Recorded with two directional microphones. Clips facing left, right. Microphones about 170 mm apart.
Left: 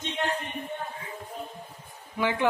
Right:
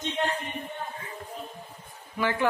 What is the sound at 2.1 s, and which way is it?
Speech, 15° left (ahead or behind).